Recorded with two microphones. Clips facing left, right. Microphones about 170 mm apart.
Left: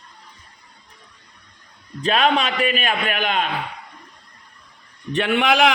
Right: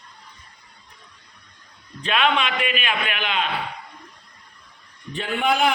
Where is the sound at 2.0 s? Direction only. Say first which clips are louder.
Left 3 dB; 40° left (ahead or behind).